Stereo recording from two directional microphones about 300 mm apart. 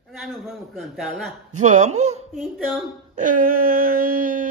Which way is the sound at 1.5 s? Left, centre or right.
Right.